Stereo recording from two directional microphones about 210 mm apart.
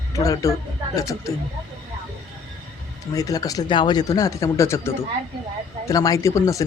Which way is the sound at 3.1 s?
15° left (ahead or behind).